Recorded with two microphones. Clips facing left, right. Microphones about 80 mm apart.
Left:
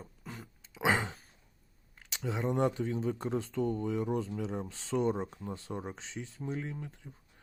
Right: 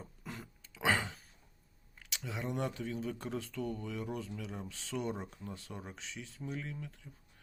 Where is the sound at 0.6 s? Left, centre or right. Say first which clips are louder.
Left 3 dB; centre.